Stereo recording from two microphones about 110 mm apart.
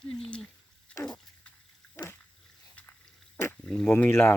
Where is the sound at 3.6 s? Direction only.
5° left (ahead or behind).